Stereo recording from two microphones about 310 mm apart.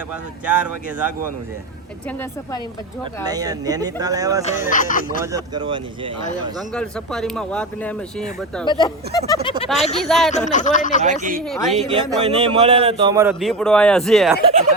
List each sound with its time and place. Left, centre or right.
0.4 s speech: centre
3.2 s speech: centre
4.6 s speech: left
5.2 s speech: centre
6.7 s speech: centre
8.6 s speech: centre
9.6 s speech: centre
10.3 s speech: left
11.0 s speech: right
11.4 s speech: centre
12.2 s speech: centre